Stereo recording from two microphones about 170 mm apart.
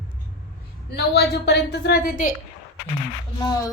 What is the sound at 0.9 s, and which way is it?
A woman's voice, 75° left (ahead or behind).